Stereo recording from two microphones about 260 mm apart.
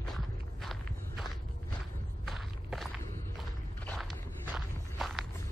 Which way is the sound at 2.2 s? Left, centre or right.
Centre.